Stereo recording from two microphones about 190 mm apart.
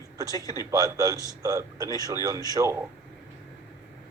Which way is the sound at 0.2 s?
20° right (ahead or behind).